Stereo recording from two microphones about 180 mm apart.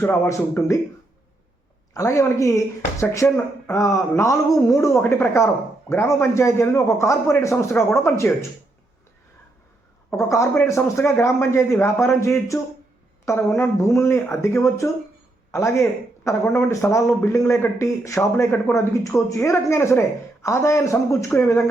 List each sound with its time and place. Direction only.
0.0 s speech: 15° left (ahead or behind)
1.9 s speech: 20° left (ahead or behind)
10.1 s speech: 15° left (ahead or behind)